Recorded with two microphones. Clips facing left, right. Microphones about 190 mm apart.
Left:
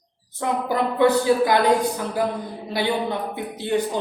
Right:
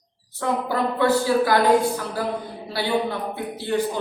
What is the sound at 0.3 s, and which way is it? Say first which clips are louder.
A woman's voice: left 1 dB; 20° left (ahead or behind).